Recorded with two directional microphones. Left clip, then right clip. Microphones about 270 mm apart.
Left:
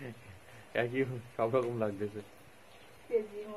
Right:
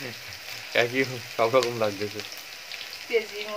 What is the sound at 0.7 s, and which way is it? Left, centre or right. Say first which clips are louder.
Speech: right 9 dB; centre.